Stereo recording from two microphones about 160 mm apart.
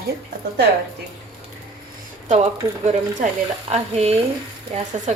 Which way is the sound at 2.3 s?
45° right (ahead or behind).